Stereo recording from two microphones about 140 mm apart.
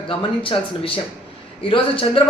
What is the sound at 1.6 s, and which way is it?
Speech, 40° left (ahead or behind).